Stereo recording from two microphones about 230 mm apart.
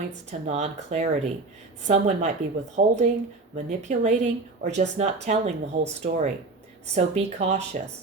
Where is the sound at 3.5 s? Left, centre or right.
Right.